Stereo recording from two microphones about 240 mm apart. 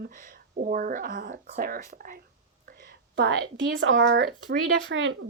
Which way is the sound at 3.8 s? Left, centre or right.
Right.